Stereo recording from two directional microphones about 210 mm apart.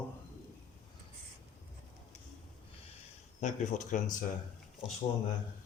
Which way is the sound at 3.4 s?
35° left (ahead or behind).